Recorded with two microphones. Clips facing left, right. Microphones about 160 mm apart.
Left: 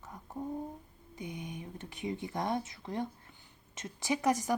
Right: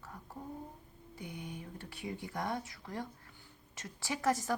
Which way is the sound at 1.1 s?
20° left (ahead or behind).